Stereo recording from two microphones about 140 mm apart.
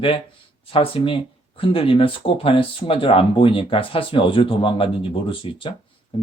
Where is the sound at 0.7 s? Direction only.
40° left (ahead or behind).